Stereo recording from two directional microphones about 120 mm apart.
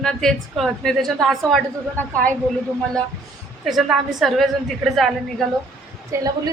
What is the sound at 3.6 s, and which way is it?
A woman's voice, 5° right (ahead or behind).